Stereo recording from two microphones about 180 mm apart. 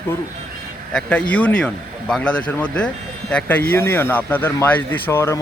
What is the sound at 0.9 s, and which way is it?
A man's voice, 5° left (ahead or behind).